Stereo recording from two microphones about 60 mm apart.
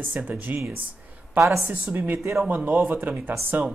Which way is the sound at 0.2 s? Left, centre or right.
Right.